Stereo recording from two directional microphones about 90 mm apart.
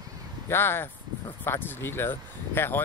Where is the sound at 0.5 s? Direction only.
25° left (ahead or behind).